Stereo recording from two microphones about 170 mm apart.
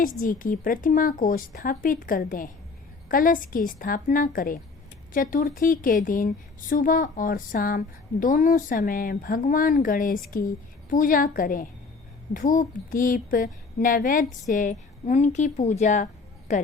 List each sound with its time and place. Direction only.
0.0 s a woman's voice: 55° left (ahead or behind)